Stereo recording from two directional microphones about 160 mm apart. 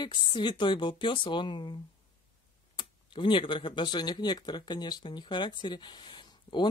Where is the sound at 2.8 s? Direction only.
30° left (ahead or behind).